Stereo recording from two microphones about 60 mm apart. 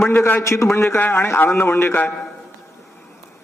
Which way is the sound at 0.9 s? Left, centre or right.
Left.